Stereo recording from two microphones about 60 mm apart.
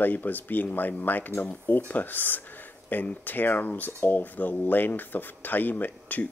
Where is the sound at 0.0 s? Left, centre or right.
Left.